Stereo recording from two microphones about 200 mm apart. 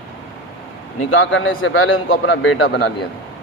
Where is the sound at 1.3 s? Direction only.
70° left (ahead or behind).